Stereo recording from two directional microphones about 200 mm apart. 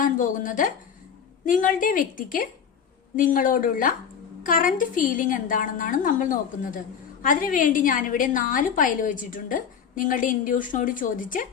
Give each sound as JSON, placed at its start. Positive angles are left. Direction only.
{"t": 0.0, "sound": "a woman's voice", "side_deg": 40}